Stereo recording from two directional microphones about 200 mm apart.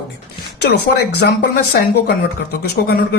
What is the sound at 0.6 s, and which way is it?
Speech, 55° left (ahead or behind).